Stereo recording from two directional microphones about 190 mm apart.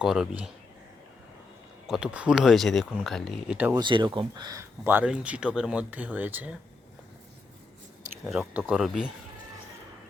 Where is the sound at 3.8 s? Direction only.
25° right (ahead or behind); by 6.5 s 10° right (ahead or behind).